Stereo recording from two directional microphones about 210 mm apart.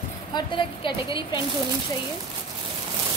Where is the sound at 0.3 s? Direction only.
20° left (ahead or behind).